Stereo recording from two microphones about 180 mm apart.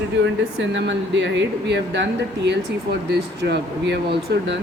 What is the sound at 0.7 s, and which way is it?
Speech, 85° right.